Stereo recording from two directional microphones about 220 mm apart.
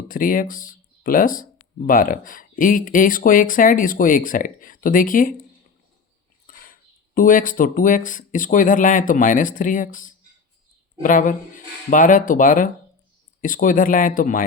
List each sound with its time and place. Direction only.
0.1 s speech: 40° left (ahead or behind)
6.7 s speech: 40° left (ahead or behind)